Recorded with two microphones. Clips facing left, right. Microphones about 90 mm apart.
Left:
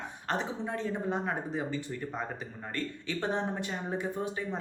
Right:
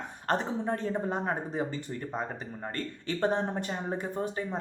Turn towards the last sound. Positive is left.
turn(degrees=-40)  # may be behind; listen again after turning